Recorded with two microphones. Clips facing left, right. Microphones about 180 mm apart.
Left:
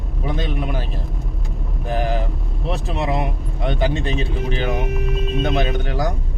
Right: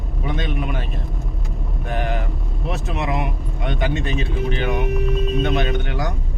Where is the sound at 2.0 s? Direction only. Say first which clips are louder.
Left 3 dB; 35° left (ahead or behind).